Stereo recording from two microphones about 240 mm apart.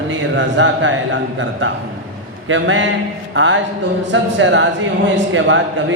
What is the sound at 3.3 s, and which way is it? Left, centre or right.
Music, right.